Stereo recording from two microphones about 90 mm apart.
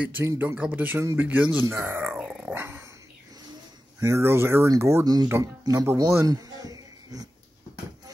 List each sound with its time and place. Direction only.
0.2 s speech: 30° right (ahead or behind)
2.1 s dog: 10° right (ahead or behind)
2.5 s dog: 25° right (ahead or behind)
4.0 s speech: 30° right (ahead or behind)
5.0 s speech: 45° right (ahead or behind)
5.4 s a man's voice: 35° right (ahead or behind)